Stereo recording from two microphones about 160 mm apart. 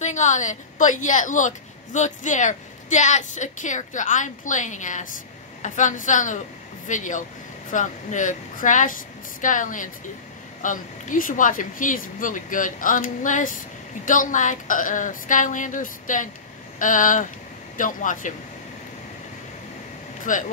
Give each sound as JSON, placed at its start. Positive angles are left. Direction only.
{"t": 0.0, "sound": "a woman's voice", "side_deg": 50}
{"t": 20.3, "sound": "a woman's voice", "side_deg": 55}